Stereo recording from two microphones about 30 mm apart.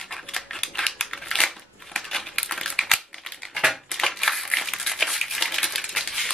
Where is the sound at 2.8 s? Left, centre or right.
Centre.